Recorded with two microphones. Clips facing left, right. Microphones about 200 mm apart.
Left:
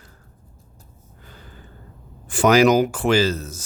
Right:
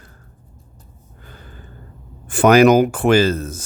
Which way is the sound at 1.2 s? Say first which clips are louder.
Right 3 dB; 55° right (ahead or behind).